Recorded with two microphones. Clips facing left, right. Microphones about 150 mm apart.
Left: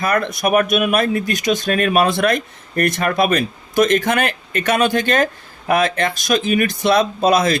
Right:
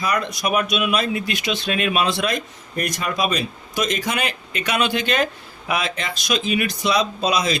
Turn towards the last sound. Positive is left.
turn(degrees=50)  # may be behind; listen again after turning